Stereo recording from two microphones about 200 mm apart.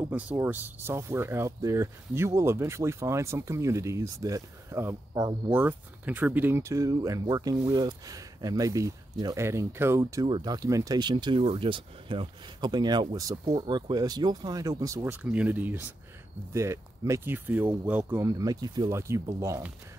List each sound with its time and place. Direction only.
0.4 s speech: 10° right (ahead or behind)